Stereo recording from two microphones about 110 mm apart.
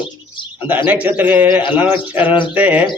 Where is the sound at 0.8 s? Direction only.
15° right (ahead or behind).